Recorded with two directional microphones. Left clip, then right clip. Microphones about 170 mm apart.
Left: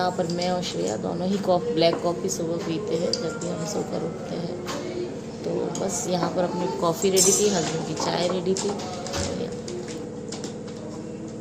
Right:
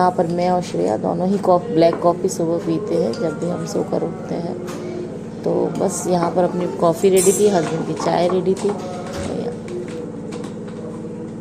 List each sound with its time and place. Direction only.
0.0 s speech: 45° right (ahead or behind)
5.8 s speech: 50° right (ahead or behind)